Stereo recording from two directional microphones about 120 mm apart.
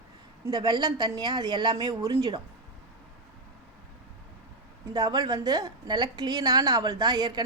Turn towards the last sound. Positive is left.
turn(degrees=-35)  # may be behind; listen again after turning